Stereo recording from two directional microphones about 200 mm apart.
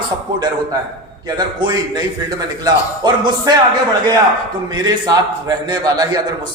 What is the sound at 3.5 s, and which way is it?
Speech, 20° right (ahead or behind).